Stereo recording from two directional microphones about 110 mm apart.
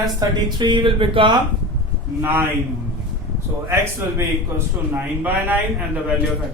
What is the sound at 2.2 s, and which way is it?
Speech, 20° right (ahead or behind).